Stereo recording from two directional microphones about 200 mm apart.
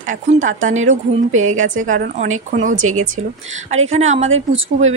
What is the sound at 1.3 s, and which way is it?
Speech, 90° right.